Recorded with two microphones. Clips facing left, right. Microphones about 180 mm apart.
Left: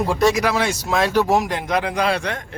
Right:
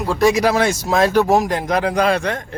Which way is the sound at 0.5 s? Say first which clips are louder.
Right 4 dB; 45° right (ahead or behind).